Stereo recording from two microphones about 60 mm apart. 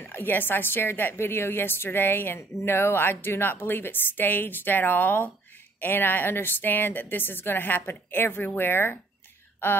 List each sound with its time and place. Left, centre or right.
0.0 s a woman's voice: left